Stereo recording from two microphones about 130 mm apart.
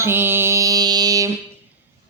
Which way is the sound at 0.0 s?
15° right (ahead or behind).